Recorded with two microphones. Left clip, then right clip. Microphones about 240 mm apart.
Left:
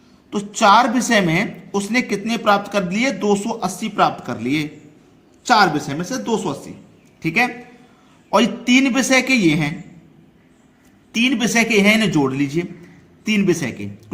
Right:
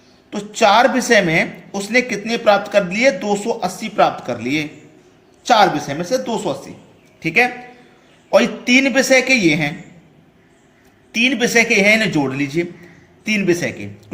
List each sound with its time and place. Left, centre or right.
0.3 s a woman's voice: left
11.1 s a woman's voice: left